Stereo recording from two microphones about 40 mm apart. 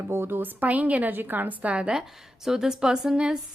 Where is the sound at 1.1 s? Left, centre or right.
Right.